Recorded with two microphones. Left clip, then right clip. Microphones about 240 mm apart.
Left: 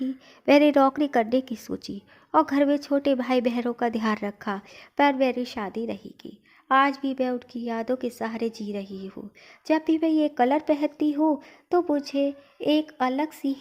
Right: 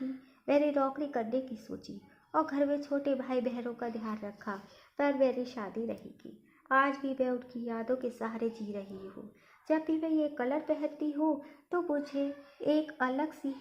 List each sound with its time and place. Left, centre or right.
0.4 s a woman's voice: left